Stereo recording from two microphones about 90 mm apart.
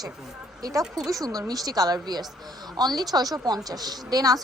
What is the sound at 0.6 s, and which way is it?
A woman's voice, 40° right (ahead or behind).